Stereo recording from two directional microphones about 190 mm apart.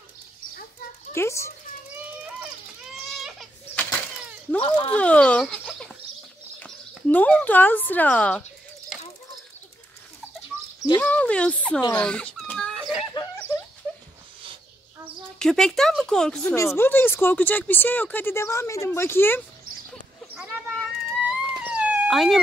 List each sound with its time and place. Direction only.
1.1 s speech: 15° left (ahead or behind)
2.9 s goat: centre (ahead or behind)
4.6 s speech: 30° left (ahead or behind)
4.9 s speech: 5° left (ahead or behind)
11.0 s speech: 5° left (ahead or behind)
11.9 s a sound: 5° left (ahead or behind)
15.3 s speech: 5° left (ahead or behind)
20.3 s a sound: 10° right (ahead or behind)
21.3 s dog: 5° right (ahead or behind)